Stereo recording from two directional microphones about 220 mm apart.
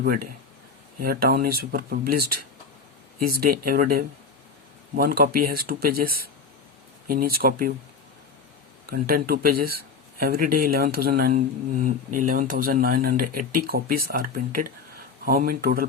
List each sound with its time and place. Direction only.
0.0 s speech: 40° right (ahead or behind)
8.9 s speech: 40° right (ahead or behind)